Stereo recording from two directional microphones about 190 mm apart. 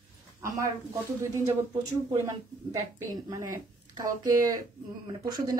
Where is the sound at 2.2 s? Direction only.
15° right (ahead or behind).